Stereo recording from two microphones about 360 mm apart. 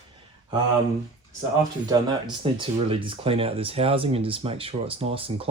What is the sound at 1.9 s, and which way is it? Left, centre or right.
Speech, centre.